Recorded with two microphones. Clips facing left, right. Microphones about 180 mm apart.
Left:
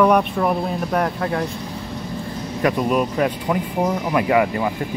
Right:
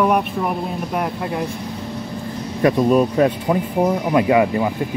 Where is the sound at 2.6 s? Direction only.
30° right (ahead or behind).